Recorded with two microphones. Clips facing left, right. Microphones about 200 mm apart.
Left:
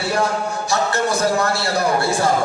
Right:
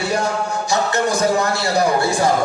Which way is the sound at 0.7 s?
15° right (ahead or behind).